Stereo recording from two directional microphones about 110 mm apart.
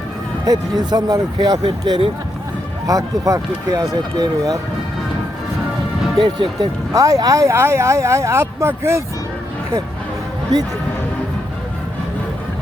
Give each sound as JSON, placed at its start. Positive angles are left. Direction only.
{"t": 0.4, "sound": "speech", "side_deg": -35}
{"t": 6.1, "sound": "speech", "side_deg": -45}
{"t": 6.9, "sound": "speech", "side_deg": -30}